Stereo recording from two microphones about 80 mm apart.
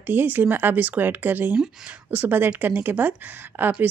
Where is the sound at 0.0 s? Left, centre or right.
Right.